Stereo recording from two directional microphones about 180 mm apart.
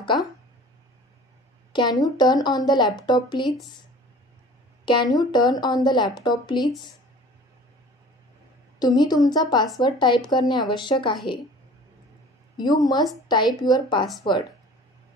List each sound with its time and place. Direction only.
0.0 s speech: 25° left (ahead or behind)
1.7 s speech: 25° left (ahead or behind)
4.8 s speech: 25° left (ahead or behind)
8.7 s speech: 20° left (ahead or behind)
12.5 s speech: 20° left (ahead or behind)